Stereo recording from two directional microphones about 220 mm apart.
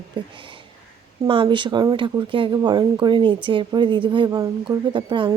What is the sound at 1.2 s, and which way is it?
A woman's voice, 20° right (ahead or behind).